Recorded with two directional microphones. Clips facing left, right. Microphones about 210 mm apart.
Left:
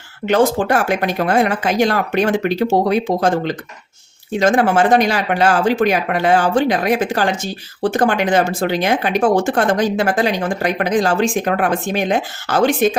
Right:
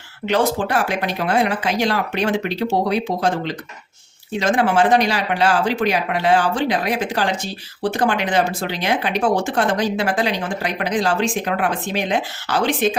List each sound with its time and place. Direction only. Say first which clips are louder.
0.3 s speech: left 4 dB; 50° left (ahead or behind)